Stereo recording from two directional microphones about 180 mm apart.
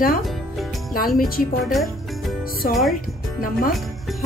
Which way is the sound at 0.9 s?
55° left (ahead or behind).